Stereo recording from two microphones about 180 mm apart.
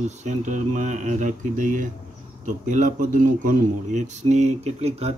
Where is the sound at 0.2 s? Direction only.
45° right (ahead or behind).